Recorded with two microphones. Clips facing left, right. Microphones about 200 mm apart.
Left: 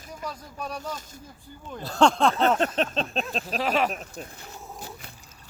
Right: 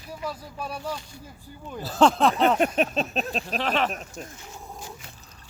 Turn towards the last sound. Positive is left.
turn(degrees=10)  # may be behind; listen again after turning